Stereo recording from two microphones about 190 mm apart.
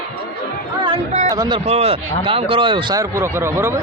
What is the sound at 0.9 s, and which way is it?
Speech, 40° right (ahead or behind).